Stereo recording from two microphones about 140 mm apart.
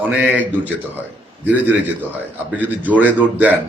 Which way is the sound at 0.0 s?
10° right (ahead or behind).